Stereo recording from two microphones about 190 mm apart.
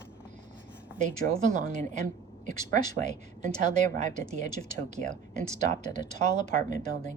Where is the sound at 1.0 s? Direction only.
40° right (ahead or behind).